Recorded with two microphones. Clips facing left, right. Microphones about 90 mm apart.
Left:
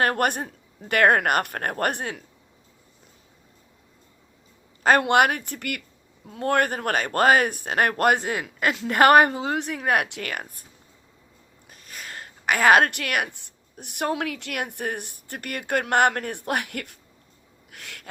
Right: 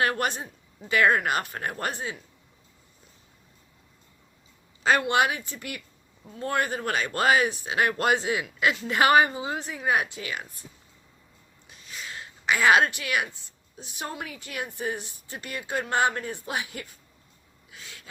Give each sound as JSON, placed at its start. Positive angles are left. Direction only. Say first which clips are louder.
{"t": 0.0, "sound": "a woman's voice", "louder": "left 4 dB", "side_deg": 50}
{"t": 4.8, "sound": "a woman's voice", "louder": "left 4 dB", "side_deg": 50}
{"t": 11.7, "sound": "a woman's voice", "louder": "even", "side_deg": 50}
{"t": 17.7, "sound": "a sound", "louder": "left 4 dB", "side_deg": 60}